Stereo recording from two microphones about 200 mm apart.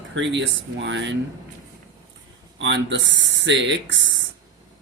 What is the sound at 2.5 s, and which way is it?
Speech, 65° right (ahead or behind).